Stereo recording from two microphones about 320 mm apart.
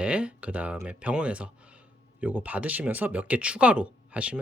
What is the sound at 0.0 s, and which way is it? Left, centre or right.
Speech, centre.